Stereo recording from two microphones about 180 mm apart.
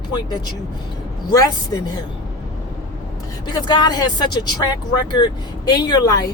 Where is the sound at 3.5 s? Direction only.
25° left (ahead or behind).